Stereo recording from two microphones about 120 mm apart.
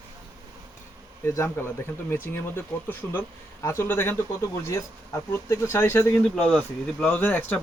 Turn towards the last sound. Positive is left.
turn(degrees=15)  # may be behind; listen again after turning